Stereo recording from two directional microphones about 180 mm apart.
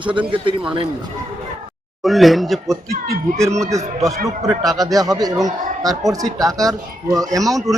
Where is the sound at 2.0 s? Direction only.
Centre (ahead or behind).